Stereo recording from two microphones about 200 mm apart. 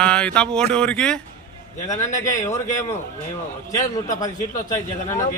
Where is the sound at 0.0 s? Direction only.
5° left (ahead or behind).